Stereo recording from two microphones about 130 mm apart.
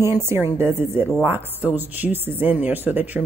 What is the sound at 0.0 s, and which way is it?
A woman's voice, 20° right (ahead or behind).